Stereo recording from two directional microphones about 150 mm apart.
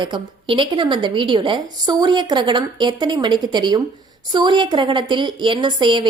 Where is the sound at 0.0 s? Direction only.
35° right (ahead or behind).